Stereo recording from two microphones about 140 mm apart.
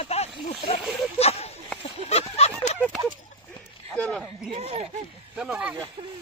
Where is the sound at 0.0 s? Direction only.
45° left (ahead or behind).